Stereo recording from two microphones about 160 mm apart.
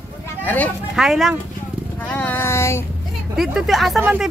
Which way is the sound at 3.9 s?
10° right (ahead or behind).